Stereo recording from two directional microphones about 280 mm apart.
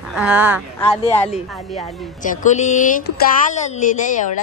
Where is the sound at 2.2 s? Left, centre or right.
Left.